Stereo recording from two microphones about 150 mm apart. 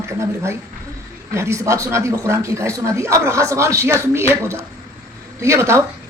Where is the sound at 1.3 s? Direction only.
20° right (ahead or behind).